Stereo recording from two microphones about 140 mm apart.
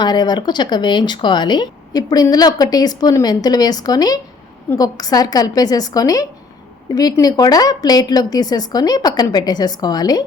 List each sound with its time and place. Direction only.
0.0 s speech: 30° left (ahead or behind)